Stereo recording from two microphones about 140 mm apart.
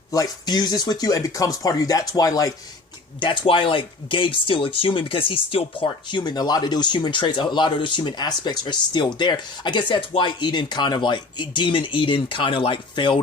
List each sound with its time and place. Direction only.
0.1 s speech: 25° left (ahead or behind)
3.2 s speech: 40° left (ahead or behind)